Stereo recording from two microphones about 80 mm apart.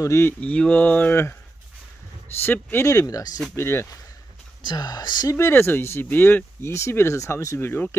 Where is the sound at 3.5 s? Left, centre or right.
Left.